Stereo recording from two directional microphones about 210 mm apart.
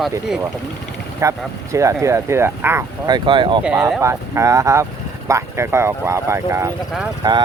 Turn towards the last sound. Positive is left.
turn(degrees=-20)  # may be behind; listen again after turning